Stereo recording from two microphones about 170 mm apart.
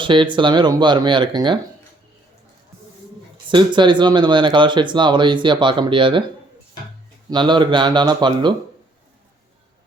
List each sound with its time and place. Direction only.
0.0 s speech: 30° right (ahead or behind)
3.5 s speech: 30° right (ahead or behind)
7.3 s speech: 25° right (ahead or behind)